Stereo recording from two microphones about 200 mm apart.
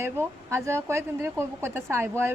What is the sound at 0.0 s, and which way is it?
Speech, 10° right (ahead or behind).